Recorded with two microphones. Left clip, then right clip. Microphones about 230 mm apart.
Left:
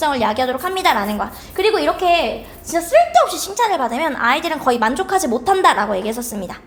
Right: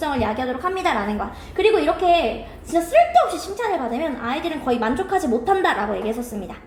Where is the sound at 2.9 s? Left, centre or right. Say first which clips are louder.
Left 3 dB; left.